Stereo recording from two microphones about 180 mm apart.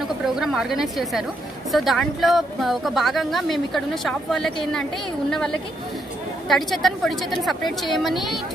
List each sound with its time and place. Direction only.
0.4 s a woman's voice: centre (ahead or behind)
6.5 s a woman's voice: centre (ahead or behind)